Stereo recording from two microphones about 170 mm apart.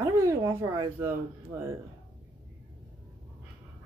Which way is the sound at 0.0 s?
20° right (ahead or behind).